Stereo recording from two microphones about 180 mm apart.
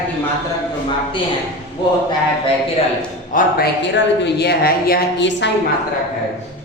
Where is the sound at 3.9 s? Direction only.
70° left (ahead or behind).